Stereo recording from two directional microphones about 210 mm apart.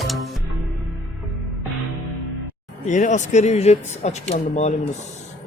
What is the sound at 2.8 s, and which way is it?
Speech, 35° left (ahead or behind).